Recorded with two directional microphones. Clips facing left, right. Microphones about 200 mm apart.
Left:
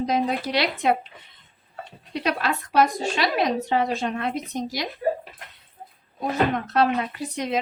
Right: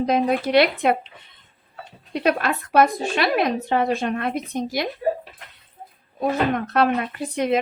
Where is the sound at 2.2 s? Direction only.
55° right (ahead or behind).